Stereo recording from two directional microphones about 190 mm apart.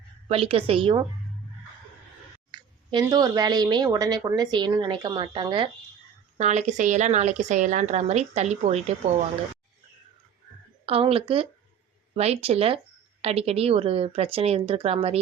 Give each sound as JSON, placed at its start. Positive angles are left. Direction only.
{"t": 0.3, "sound": "speech", "side_deg": -30}
{"t": 2.5, "sound": "speech", "side_deg": -20}
{"t": 10.8, "sound": "speech", "side_deg": -30}